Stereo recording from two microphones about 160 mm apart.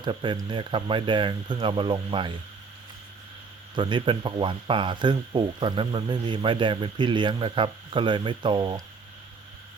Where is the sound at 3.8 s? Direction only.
30° right (ahead or behind).